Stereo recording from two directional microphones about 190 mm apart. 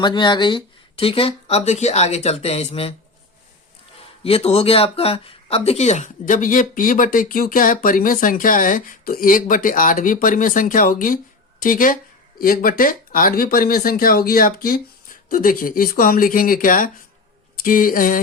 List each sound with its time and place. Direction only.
0.0 s speech: 25° left (ahead or behind)
4.2 s speech: 30° left (ahead or behind); by 18.2 s 45° left (ahead or behind)